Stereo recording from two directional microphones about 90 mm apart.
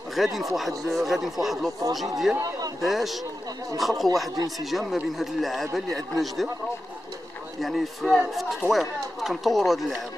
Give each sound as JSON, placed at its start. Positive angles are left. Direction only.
{"t": 0.1, "sound": "speech", "side_deg": 0}
{"t": 2.3, "sound": "a man's voice", "side_deg": -40}
{"t": 2.8, "sound": "speech", "side_deg": 0}
{"t": 7.6, "sound": "speech", "side_deg": 0}